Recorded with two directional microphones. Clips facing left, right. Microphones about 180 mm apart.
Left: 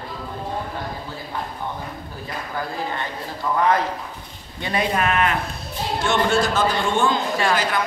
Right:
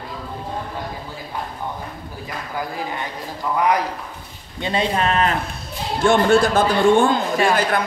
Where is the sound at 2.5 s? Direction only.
15° right (ahead or behind).